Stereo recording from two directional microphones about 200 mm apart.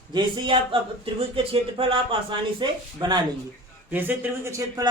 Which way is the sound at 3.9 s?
10° right (ahead or behind).